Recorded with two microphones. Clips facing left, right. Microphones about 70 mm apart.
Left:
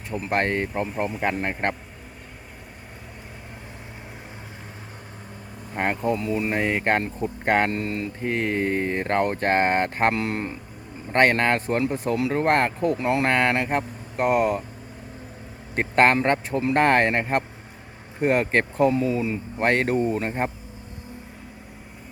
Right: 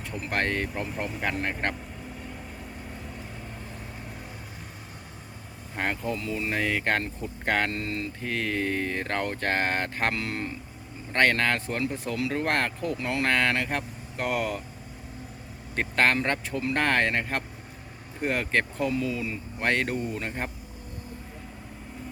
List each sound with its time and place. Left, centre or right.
0.1 s speech: left
5.7 s speech: left
15.7 s speech: left